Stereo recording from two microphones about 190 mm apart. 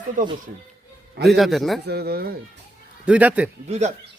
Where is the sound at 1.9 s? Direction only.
55° right (ahead or behind).